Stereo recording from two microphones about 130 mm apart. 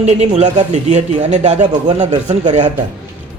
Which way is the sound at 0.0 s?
55° right (ahead or behind).